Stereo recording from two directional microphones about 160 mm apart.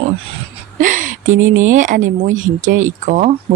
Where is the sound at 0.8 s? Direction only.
55° right (ahead or behind).